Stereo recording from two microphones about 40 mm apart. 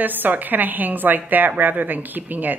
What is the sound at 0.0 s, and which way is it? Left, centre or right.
A woman's voice, right.